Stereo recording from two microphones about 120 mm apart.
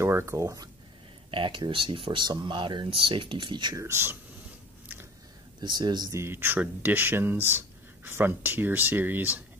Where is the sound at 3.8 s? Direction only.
20° right (ahead or behind).